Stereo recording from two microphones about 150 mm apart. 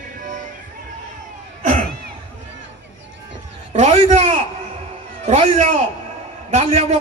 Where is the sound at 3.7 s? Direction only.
55° right (ahead or behind).